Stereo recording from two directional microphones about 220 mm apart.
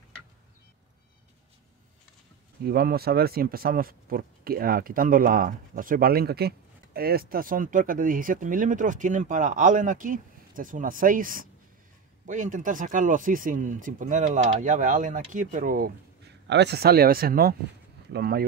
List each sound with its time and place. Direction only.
2.6 s speech: 45° right (ahead or behind)
16.4 s speech: 50° right (ahead or behind)